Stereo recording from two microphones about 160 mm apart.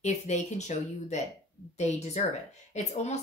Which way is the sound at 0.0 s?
45° left (ahead or behind).